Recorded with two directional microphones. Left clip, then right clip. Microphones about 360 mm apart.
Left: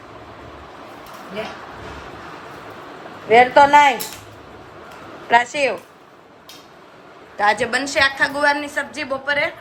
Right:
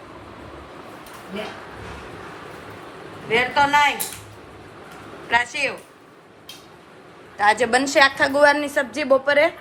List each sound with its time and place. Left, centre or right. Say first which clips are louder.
3.2 s a man's voice: left 7 dB; centre
5.3 s a man's voice: left 5 dB; centre
7.3 s a woman's voice: even; centre